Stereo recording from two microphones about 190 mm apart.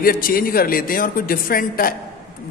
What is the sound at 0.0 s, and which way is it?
A man's voice, 50° left (ahead or behind).